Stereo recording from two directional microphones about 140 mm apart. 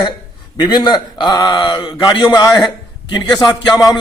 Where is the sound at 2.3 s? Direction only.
25° left (ahead or behind).